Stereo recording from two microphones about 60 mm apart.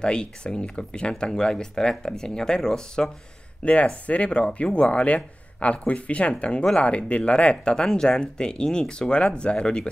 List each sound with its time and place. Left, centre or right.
0.0 s speech: centre